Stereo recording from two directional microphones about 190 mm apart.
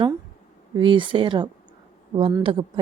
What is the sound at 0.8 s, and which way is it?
A woman's voice, 25° right (ahead or behind).